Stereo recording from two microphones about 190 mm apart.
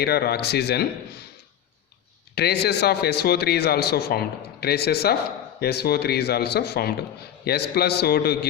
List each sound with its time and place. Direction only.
0.0 s a man's voice: 55° left (ahead or behind)
2.3 s a man's voice: 60° left (ahead or behind)